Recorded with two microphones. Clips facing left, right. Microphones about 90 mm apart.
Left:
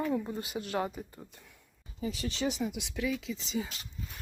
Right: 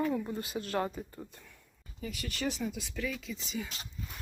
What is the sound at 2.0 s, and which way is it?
Speech, 25° left (ahead or behind).